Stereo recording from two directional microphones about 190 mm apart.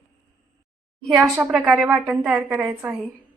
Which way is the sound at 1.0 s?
Centre (ahead or behind).